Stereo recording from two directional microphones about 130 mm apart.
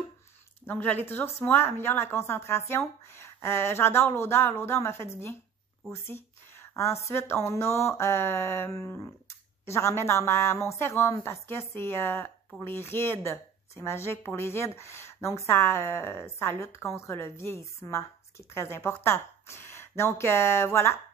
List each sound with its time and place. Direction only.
0.7 s a woman's voice: 15° left (ahead or behind)